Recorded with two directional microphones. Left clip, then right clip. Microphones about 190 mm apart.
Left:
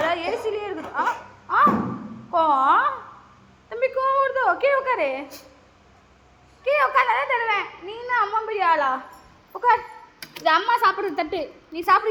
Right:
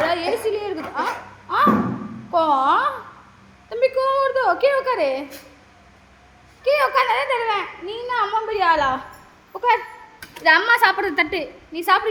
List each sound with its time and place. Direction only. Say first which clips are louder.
0.1 s a sound: right 3 dB; centre (ahead or behind)
6.7 s a child's voice: right 2 dB; centre (ahead or behind)
10.4 s a woman's voice: right 4 dB; 15° right (ahead or behind)
11.7 s a child's voice: right 1 dB; centre (ahead or behind)